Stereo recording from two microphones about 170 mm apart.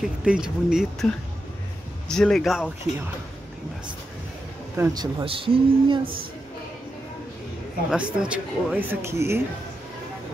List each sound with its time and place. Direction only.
0.0 s speech: 5° right (ahead or behind)
2.0 s speech: 5° left (ahead or behind)
4.7 s speech: 15° right (ahead or behind)
5.0 s speech: 30° right (ahead or behind)
7.9 s speech: 5° right (ahead or behind)